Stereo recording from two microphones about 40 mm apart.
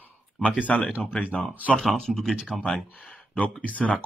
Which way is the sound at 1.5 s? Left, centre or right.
Right.